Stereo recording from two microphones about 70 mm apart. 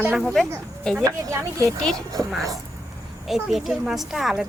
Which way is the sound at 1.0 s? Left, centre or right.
Right.